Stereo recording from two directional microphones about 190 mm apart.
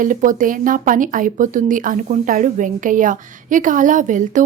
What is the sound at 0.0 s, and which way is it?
Speech, 45° right (ahead or behind).